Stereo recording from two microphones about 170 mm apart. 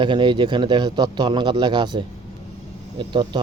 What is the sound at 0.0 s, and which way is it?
Speech, 30° right (ahead or behind).